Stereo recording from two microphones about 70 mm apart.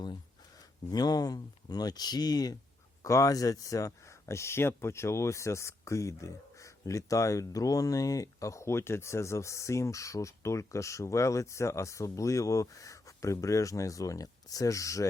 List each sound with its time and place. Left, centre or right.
0.9 s speech: left
3.0 s speech: left